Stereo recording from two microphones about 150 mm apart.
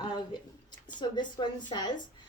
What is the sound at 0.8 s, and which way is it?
Speech, 30° left (ahead or behind).